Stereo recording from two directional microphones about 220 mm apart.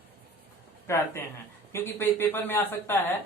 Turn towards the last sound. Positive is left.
turn(degrees=10)  # may be behind; listen again after turning